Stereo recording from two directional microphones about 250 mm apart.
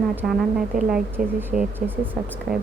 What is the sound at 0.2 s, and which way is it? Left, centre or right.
Speech, centre.